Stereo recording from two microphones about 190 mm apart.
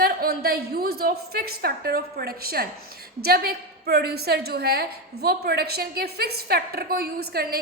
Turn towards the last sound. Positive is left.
turn(degrees=-55)  # may be behind; listen again after turning